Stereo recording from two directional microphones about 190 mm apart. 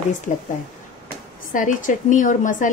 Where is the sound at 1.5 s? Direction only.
45° left (ahead or behind).